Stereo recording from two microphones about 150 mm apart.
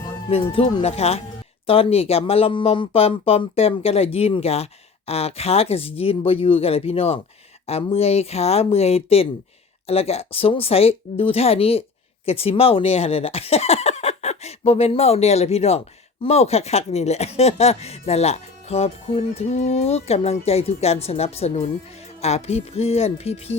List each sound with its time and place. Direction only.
0.5 s speech: 40° left (ahead or behind)